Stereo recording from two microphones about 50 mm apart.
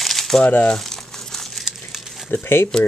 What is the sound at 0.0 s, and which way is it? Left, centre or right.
Crumpling, centre.